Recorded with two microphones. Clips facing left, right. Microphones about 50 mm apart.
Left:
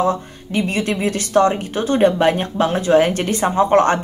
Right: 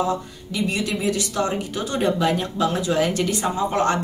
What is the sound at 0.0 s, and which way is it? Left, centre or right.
Speech, left.